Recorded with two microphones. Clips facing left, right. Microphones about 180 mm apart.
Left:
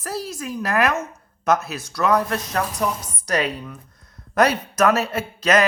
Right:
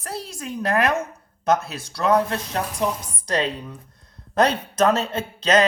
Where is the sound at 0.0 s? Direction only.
30° right (ahead or behind).